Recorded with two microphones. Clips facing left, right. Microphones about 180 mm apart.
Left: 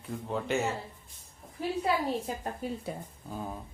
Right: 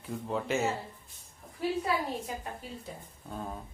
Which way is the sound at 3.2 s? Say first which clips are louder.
Left 1 dB; 5° left (ahead or behind).